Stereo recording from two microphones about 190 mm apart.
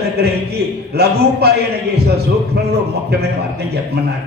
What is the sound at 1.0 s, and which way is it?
Speech, 60° right (ahead or behind).